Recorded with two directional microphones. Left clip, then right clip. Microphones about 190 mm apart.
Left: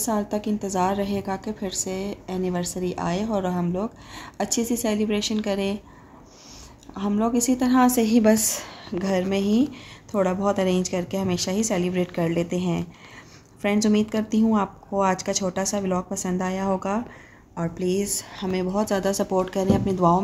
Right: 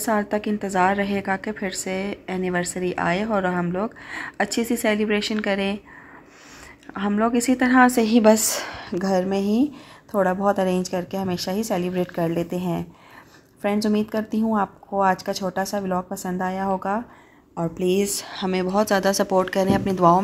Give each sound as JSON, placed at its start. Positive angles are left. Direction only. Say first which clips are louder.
{"t": 0.0, "sound": "a woman's voice", "louder": "right 3 dB", "side_deg": -15}
{"t": 6.9, "sound": "a woman's voice", "louder": "right 3 dB", "side_deg": -10}
{"t": 17.6, "sound": "a woman's voice", "louder": "right 4 dB", "side_deg": -20}